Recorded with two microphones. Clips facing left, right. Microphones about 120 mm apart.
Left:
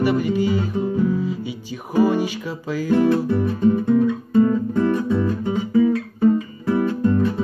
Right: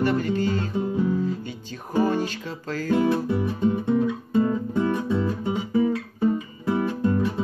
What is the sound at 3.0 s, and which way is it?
Music, 20° right (ahead or behind).